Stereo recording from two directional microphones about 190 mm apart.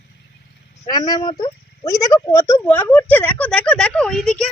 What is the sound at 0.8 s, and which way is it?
Speech, 20° left (ahead or behind).